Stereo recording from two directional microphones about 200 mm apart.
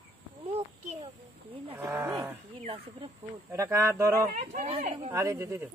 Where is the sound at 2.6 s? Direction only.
30° right (ahead or behind).